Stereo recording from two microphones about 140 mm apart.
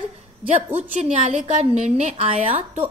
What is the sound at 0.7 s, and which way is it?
A woman's voice, 50° right (ahead or behind).